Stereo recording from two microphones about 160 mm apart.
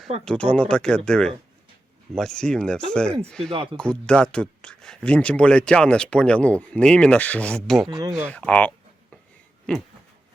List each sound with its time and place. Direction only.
0.3 s speech: 10° left (ahead or behind)
3.5 s speech: 35° right (ahead or behind)
3.8 s speech: 5° left (ahead or behind)
7.9 s speech: 25° right (ahead or behind)
8.3 s speech: 10° left (ahead or behind)